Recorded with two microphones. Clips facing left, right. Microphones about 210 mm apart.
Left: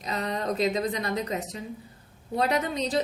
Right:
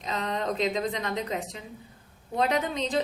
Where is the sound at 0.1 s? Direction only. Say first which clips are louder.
Left 1 dB; 40° left (ahead or behind).